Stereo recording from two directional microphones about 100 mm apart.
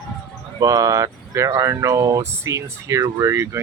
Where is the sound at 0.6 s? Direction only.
35° right (ahead or behind).